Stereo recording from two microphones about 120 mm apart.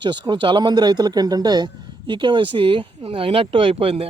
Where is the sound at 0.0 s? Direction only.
40° right (ahead or behind).